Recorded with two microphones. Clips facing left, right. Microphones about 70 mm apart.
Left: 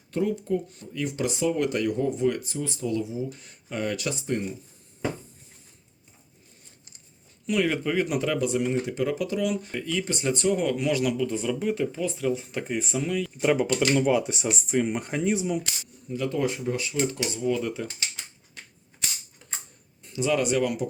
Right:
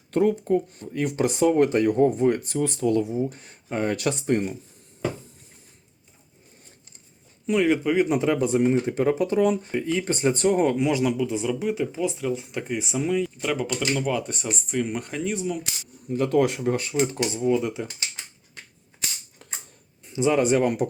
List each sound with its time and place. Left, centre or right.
0.1 s speech: right
2.4 s speech: right
7.4 s speech: centre; by 10.7 s right
10.7 s speech: right
11.3 s speech: centre
13.4 s speech: centre
16.0 s speech: right
17.0 s speech: right
17.6 s speech: centre
19.4 s typewriter: right
20.1 s speech: right